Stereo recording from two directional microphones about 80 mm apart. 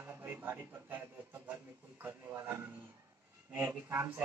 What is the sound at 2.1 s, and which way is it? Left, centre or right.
Speech, right.